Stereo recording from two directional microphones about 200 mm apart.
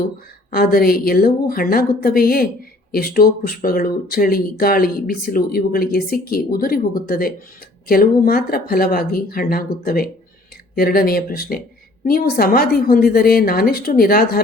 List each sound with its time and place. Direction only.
0.5 s speech: 50° left (ahead or behind)